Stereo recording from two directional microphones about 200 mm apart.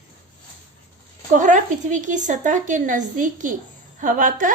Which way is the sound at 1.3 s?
40° right (ahead or behind).